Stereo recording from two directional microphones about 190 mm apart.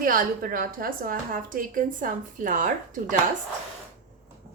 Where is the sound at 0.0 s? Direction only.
50° right (ahead or behind).